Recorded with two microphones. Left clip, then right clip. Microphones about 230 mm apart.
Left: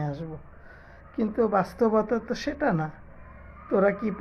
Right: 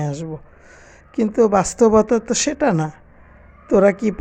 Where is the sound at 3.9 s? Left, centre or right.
Right.